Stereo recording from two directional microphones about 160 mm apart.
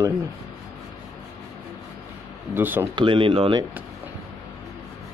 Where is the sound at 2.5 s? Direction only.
15° right (ahead or behind).